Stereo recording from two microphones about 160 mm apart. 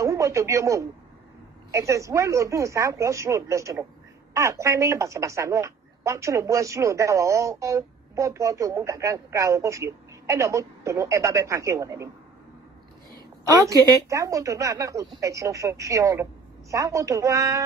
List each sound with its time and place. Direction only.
0.0 s speech: 20° right (ahead or behind)
13.1 s speech: 20° right (ahead or behind)